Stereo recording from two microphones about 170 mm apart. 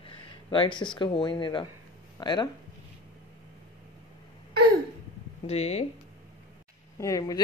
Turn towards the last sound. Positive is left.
turn(degrees=20)  # may be behind; listen again after turning